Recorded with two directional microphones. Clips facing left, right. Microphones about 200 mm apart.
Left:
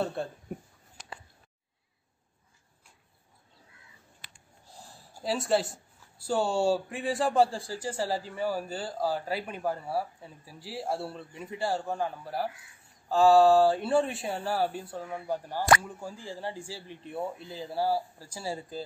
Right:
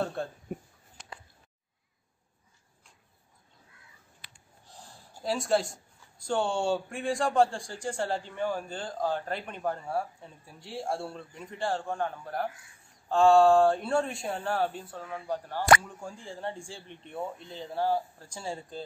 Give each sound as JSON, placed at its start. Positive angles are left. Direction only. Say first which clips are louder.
{"t": 0.0, "sound": "speech", "louder": "left 1 dB", "side_deg": 0}
{"t": 5.2, "sound": "speech", "louder": "even", "side_deg": 0}